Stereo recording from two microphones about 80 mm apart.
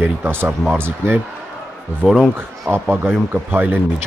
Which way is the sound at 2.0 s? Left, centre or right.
Centre.